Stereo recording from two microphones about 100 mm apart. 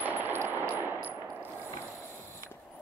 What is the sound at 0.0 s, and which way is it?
Clang, 20° right (ahead or behind).